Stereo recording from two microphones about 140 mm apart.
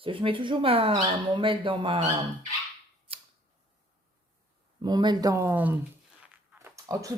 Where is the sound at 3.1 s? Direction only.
40° right (ahead or behind).